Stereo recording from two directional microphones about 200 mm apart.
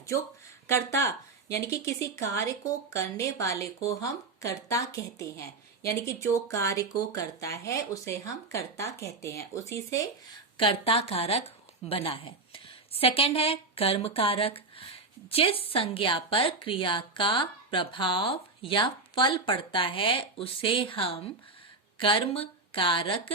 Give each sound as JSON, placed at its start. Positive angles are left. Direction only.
{"t": 0.7, "sound": "speech", "side_deg": 15}
{"t": 10.6, "sound": "a woman's voice", "side_deg": 25}